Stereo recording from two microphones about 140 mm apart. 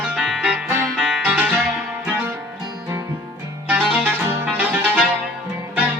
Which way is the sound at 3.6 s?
10° right (ahead or behind).